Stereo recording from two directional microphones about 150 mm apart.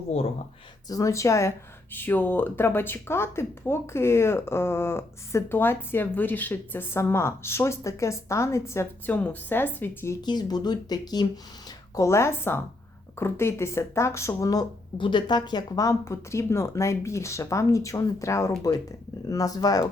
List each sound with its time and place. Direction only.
0.9 s speech: 20° left (ahead or behind)
10.2 s speech: 25° left (ahead or behind)